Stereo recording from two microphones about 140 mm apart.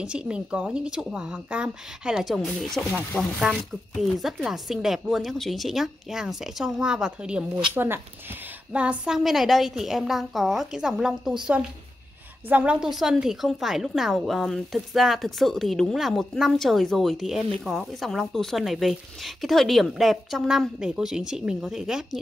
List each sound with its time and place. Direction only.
0.0 s a woman's voice: 5° right (ahead or behind)
12.4 s a woman's voice: 10° right (ahead or behind)